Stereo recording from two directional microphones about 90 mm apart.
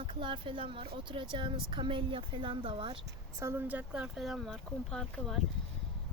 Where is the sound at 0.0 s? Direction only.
80° right.